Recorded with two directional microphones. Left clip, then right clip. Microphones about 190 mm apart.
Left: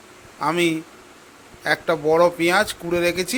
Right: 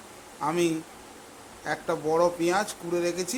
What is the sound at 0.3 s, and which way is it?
Speech, 20° left (ahead or behind).